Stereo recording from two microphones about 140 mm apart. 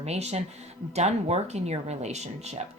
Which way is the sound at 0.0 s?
50° right (ahead or behind).